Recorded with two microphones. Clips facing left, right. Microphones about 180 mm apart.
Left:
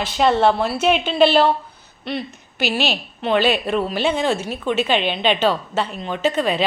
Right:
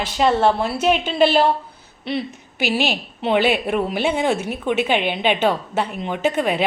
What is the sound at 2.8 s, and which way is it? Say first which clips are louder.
Speech: right 1 dB; 15° right (ahead or behind).